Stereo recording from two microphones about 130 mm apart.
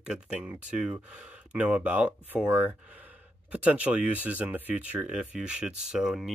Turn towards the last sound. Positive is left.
turn(degrees=-5)  # may be behind; listen again after turning